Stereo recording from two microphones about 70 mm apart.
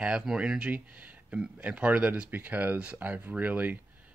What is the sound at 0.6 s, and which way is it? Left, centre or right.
Speech, right.